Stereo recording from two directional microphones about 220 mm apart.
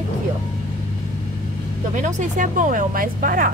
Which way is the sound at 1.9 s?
35° right (ahead or behind).